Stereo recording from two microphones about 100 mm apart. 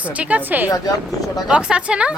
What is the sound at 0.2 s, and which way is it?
A woman's voice, 15° right (ahead or behind).